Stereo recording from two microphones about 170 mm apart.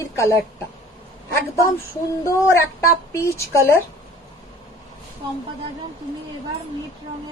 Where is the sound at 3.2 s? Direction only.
15° left (ahead or behind).